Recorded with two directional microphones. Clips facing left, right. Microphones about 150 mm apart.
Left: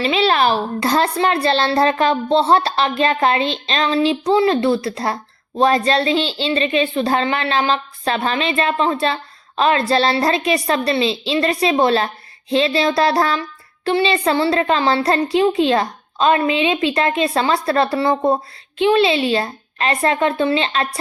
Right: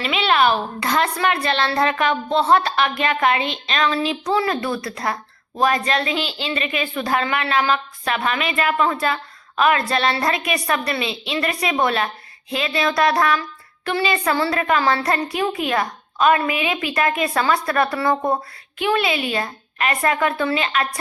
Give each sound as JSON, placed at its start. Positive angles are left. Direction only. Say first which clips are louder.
{"t": 0.0, "sound": "a child's voice", "louder": "left 2 dB", "side_deg": 35}